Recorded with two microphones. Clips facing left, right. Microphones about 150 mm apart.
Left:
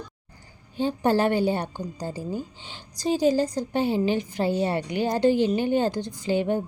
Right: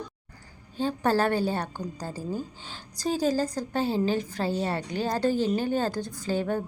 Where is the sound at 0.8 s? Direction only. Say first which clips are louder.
Left 3 dB; 35° right (ahead or behind).